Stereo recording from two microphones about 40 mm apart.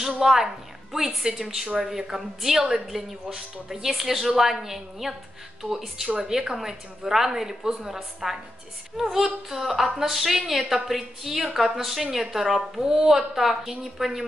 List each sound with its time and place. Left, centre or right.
0.2 s a woman's voice: centre
6.0 s a woman's voice: centre